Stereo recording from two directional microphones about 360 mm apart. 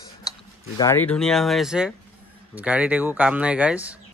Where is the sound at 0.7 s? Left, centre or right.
Centre.